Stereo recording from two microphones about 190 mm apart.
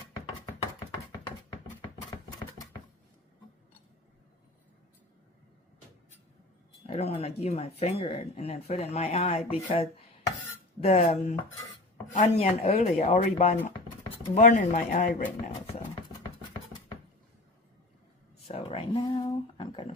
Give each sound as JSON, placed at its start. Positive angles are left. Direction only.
{"t": 6.8, "sound": "speech", "side_deg": 30}
{"t": 18.4, "sound": "speech", "side_deg": 30}